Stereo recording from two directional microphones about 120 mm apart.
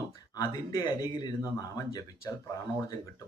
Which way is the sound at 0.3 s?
30° left (ahead or behind).